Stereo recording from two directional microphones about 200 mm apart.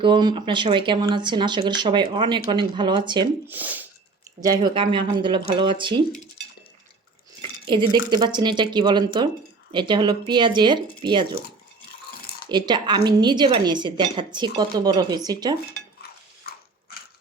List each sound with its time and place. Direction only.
0.0 s speech: 25° right (ahead or behind)
3.4 s speech: 10° right (ahead or behind); by 6.0 s 25° right (ahead or behind)
7.7 s speech: 20° right (ahead or behind)
12.5 s speech: 20° right (ahead or behind)